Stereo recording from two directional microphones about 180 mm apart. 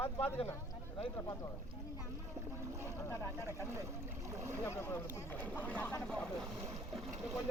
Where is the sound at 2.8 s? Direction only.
15° left (ahead or behind).